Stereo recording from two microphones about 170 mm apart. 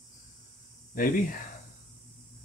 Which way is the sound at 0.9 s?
55° left (ahead or behind).